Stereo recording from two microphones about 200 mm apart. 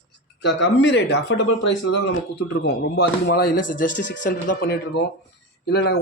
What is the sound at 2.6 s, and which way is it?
A man's voice, 55° left (ahead or behind).